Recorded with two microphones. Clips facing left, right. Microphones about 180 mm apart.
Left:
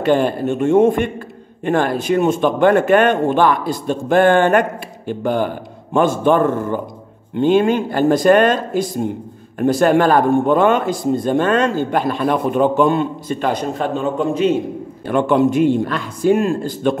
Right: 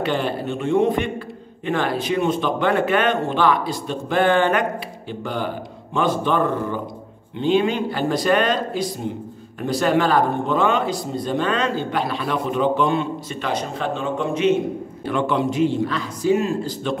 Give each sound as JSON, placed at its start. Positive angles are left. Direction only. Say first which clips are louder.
{"t": 0.0, "sound": "a man's voice", "louder": "left 7 dB", "side_deg": 45}